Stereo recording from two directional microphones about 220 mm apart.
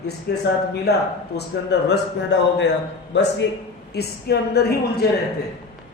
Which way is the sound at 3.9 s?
45° left (ahead or behind).